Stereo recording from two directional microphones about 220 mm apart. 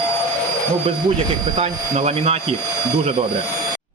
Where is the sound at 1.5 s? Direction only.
30° right (ahead or behind).